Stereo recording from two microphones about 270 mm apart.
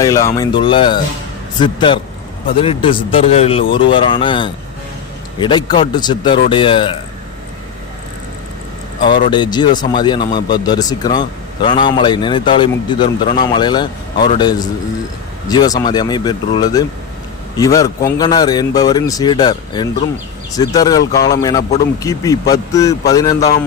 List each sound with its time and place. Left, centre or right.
0.0 s speech: centre
9.3 s speech: centre